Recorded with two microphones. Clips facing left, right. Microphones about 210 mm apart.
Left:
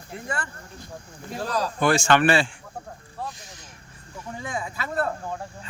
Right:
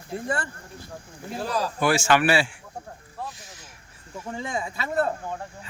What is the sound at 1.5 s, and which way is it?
A man's voice, 5° right (ahead or behind).